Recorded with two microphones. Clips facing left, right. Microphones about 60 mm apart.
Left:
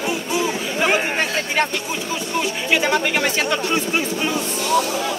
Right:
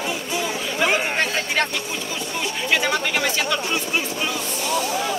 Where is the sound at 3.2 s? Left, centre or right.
Left.